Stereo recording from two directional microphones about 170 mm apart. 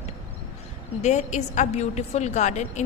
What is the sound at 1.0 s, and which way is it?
A woman's voice, 45° left (ahead or behind).